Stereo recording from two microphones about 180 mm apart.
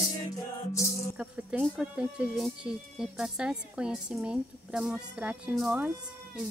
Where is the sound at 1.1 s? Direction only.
5° right (ahead or behind).